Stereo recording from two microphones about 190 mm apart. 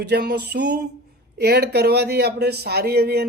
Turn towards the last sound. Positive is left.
turn(degrees=-55)  # may be behind; listen again after turning